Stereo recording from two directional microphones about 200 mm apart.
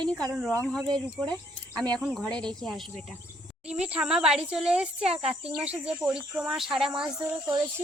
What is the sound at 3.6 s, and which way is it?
Speech, 5° right (ahead or behind).